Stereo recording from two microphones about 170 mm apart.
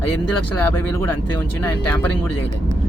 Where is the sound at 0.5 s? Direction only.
10° left (ahead or behind).